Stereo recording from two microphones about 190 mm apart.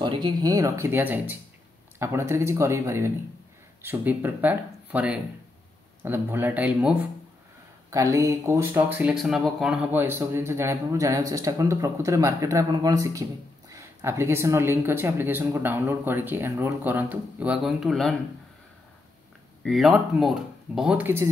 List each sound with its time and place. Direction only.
0.0 s a man's voice: 25° right (ahead or behind); by 18.1 s centre (ahead or behind)
19.6 s speech: centre (ahead or behind)